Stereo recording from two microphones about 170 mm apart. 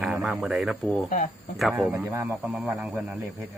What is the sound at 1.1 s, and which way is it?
Speech, 50° left (ahead or behind).